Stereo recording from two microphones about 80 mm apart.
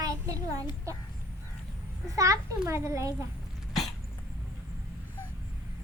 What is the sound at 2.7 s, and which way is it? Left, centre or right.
Speech, right.